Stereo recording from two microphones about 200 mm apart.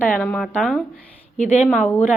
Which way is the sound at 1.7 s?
10° left (ahead or behind).